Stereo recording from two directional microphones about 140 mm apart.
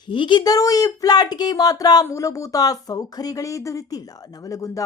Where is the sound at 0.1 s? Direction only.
35° left (ahead or behind).